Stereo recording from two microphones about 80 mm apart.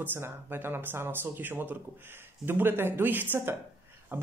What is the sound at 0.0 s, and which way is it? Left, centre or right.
A woman's voice, right.